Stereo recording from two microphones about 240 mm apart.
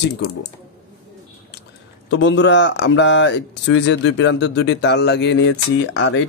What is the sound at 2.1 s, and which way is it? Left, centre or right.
Speech, left.